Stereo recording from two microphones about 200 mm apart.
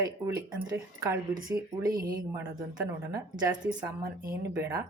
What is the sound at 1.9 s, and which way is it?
Speech, 45° right (ahead or behind).